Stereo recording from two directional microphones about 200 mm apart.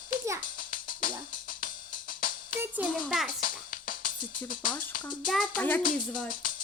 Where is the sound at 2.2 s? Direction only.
45° left (ahead or behind).